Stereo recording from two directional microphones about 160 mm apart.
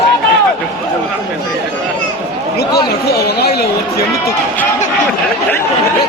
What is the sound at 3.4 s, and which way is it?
Chatter, 85° left.